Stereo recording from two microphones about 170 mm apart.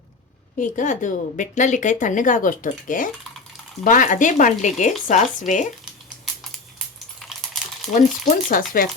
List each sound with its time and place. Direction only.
0.6 s speech: 45° left (ahead or behind)
7.2 s computer keyboard: centre (ahead or behind)
7.9 s speech: 50° left (ahead or behind)